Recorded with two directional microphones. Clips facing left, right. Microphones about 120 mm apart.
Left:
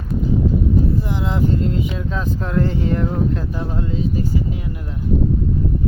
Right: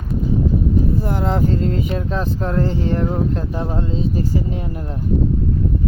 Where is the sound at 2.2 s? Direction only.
35° right (ahead or behind).